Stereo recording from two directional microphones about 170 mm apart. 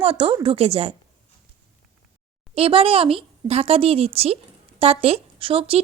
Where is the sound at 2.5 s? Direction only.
35° right (ahead or behind).